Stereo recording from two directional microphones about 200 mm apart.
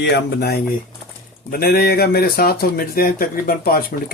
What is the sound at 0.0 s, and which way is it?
Speech, 55° left (ahead or behind).